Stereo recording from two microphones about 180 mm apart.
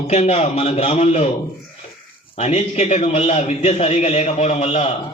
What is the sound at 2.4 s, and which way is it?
A man's voice, 35° left (ahead or behind).